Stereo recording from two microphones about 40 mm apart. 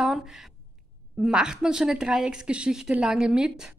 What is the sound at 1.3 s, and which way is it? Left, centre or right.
A woman's voice, centre.